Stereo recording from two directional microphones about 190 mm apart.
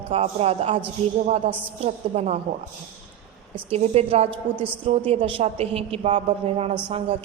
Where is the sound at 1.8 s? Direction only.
35° right (ahead or behind).